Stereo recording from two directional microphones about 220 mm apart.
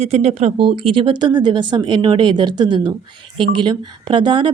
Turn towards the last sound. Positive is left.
turn(degrees=-20)  # may be behind; listen again after turning